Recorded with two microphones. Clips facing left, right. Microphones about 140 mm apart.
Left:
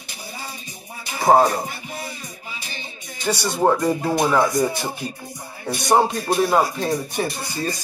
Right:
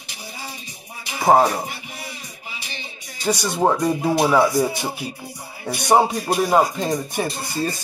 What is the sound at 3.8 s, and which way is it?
Speech, 10° right (ahead or behind).